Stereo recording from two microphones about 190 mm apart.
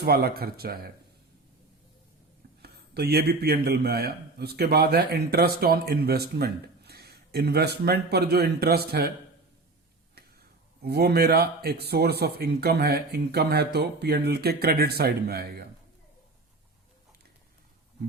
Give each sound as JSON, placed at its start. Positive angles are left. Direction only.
{"t": 0.0, "sound": "speech", "side_deg": -55}
{"t": 2.6, "sound": "a man's voice", "side_deg": -55}
{"t": 10.2, "sound": "a sound", "side_deg": -55}
{"t": 10.8, "sound": "a man's voice", "side_deg": -55}